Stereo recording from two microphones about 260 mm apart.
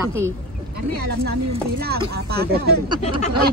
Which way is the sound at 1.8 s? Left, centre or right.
Right.